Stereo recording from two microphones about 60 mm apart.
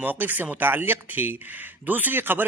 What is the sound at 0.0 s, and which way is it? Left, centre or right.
A man's voice, right.